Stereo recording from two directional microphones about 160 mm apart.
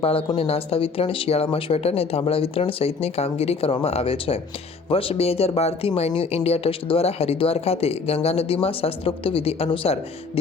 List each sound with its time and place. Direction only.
0.0 s speech: 35° left (ahead or behind)